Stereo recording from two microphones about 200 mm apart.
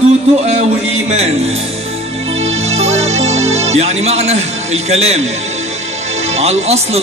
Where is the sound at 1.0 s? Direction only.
30° right (ahead or behind).